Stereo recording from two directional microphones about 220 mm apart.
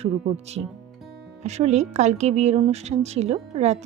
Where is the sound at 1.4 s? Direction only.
30° right (ahead or behind).